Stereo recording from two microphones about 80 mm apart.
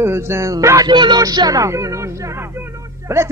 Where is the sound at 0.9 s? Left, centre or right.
Right.